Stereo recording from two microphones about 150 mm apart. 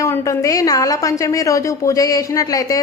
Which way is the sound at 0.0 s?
25° left (ahead or behind).